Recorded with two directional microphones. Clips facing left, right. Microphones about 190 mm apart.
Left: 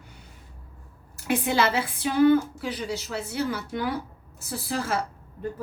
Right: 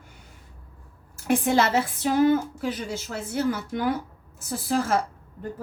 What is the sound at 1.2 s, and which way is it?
A woman's voice, 45° right (ahead or behind).